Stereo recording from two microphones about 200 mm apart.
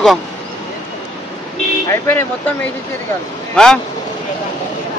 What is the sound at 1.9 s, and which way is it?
Speech, 10° left (ahead or behind).